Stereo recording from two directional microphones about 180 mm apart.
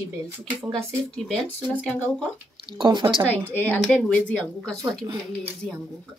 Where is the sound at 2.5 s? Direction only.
25° right (ahead or behind).